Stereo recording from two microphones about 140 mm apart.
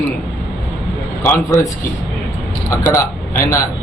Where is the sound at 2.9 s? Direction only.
20° left (ahead or behind).